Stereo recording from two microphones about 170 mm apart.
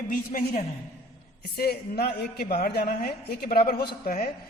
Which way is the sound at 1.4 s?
65° left (ahead or behind).